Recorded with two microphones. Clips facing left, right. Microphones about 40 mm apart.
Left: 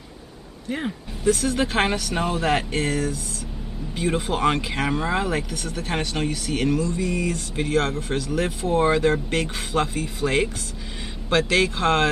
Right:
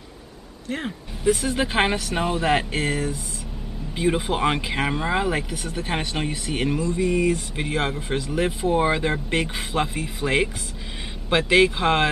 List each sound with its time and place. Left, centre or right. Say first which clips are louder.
0.7 s speech: left 1 dB; centre
1.2 s speech: even; centre